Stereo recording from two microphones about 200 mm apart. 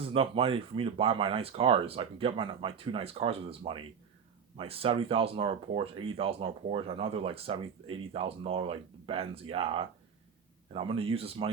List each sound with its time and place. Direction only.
0.0 s speech: 30° right (ahead or behind)